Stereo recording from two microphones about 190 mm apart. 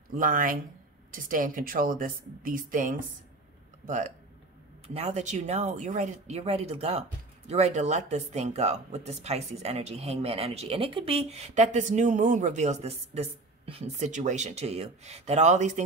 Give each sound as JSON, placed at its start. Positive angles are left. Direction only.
{"t": 0.1, "sound": "a woman's voice", "side_deg": -45}